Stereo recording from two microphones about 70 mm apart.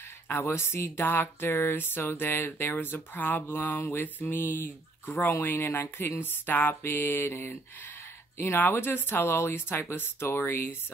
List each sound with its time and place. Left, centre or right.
0.3 s speech: left